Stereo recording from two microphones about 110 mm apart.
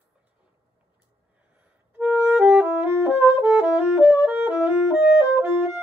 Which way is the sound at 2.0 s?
15° right (ahead or behind).